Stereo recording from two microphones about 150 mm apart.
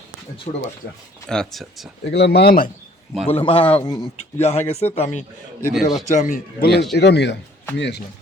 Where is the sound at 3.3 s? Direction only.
35° left (ahead or behind).